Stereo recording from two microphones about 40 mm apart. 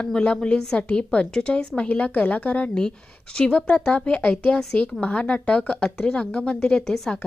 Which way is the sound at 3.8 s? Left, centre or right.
Left.